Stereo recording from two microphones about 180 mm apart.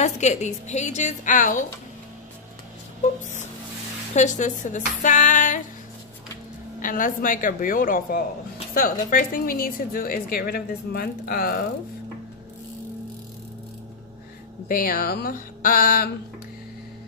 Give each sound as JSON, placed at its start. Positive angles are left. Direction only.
{"t": 0.0, "sound": "a woman's voice", "side_deg": 40}
{"t": 4.1, "sound": "a woman's voice", "side_deg": 40}
{"t": 6.8, "sound": "a woman's voice", "side_deg": 50}
{"t": 14.7, "sound": "a woman's voice", "side_deg": 55}